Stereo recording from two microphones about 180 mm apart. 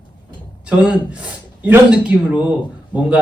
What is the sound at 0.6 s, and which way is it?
A man's voice, 5° right (ahead or behind).